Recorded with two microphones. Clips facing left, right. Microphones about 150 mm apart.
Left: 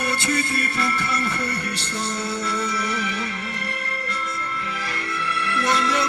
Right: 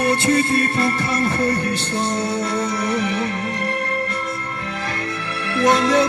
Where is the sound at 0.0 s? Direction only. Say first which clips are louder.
Right 7 dB; 30° right (ahead or behind).